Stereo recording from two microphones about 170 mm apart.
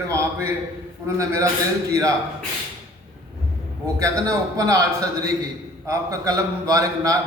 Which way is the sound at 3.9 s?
20° right (ahead or behind).